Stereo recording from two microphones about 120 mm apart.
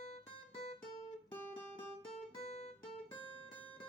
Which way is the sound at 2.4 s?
65° left (ahead or behind).